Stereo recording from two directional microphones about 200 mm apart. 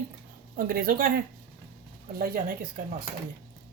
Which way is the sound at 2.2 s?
45° right (ahead or behind).